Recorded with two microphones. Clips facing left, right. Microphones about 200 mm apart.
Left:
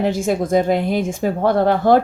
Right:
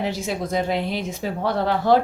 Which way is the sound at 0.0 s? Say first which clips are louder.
Left 7 dB; 50° left (ahead or behind).